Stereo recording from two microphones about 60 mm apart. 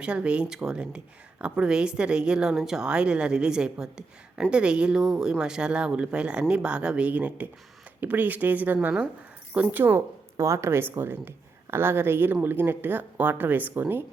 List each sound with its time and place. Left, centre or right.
0.0 s speech: centre; by 10.0 s right
10.3 s speech: right